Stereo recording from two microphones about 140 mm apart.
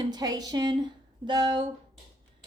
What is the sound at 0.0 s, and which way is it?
A woman's voice, 30° right (ahead or behind).